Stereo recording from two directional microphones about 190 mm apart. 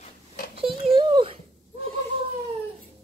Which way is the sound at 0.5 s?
30° right (ahead or behind).